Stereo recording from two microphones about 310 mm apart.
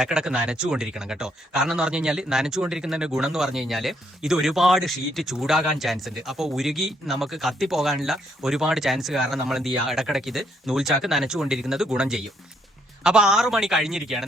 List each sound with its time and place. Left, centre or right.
0.0 s speech: centre